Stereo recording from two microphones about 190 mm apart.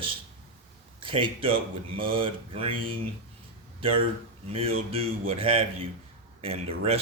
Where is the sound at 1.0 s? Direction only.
25° right (ahead or behind).